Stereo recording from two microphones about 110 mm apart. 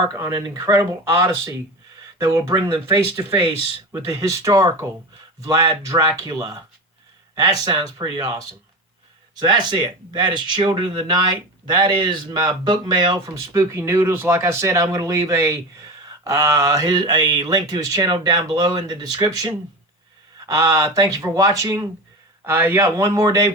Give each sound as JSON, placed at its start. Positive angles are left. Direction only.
{"t": 0.2, "sound": "speech", "side_deg": -35}
{"t": 3.9, "sound": "speech", "side_deg": -30}
{"t": 13.3, "sound": "speech", "side_deg": -25}
{"t": 22.4, "sound": "speech", "side_deg": -20}